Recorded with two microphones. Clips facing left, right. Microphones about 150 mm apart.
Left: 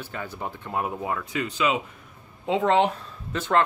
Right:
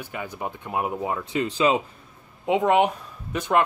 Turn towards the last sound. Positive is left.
turn(degrees=-15)  # may be behind; listen again after turning